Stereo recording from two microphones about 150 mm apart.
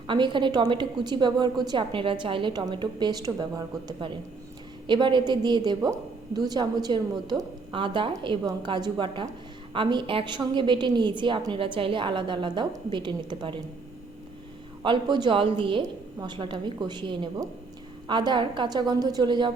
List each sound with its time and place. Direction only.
0.1 s a woman's voice: 30° right (ahead or behind)
14.8 s a woman's voice: 30° right (ahead or behind)